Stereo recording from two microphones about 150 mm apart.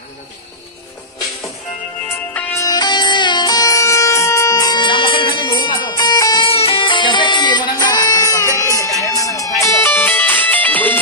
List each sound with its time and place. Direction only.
2.0 s music: 15° left (ahead or behind)
6.5 s music: 40° left (ahead or behind); by 11.0 s 10° left (ahead or behind)